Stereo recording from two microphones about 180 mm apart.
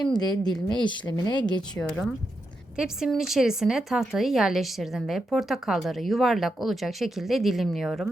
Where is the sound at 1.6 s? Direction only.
5° left (ahead or behind).